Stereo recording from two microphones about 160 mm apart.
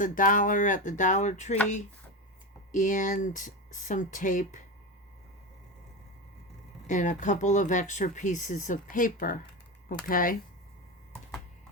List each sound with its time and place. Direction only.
0.0 s speech: 55° left (ahead or behind)
2.7 s speech: 50° left (ahead or behind)
6.8 s speech: 50° left (ahead or behind)